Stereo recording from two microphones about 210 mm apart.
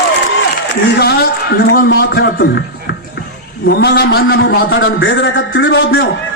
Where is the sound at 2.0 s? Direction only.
50° left (ahead or behind).